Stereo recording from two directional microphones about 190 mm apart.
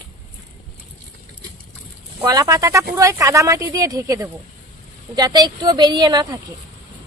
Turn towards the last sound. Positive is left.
turn(degrees=-20)  # may be behind; listen again after turning